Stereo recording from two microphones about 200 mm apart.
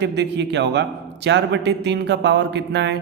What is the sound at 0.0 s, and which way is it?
Speech, 60° right (ahead or behind).